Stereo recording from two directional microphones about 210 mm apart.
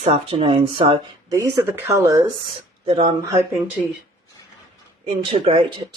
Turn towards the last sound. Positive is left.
turn(degrees=-25)  # may be behind; listen again after turning